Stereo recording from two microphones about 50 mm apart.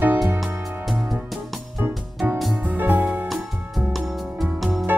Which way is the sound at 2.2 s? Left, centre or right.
Right.